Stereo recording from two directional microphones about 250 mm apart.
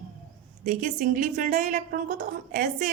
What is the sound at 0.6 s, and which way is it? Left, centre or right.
A woman's voice, right.